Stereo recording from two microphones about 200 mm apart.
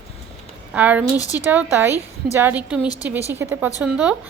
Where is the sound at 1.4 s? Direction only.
10° right (ahead or behind).